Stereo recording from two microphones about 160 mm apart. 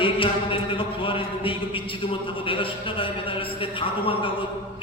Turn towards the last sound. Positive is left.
turn(degrees=35)  # may be behind; listen again after turning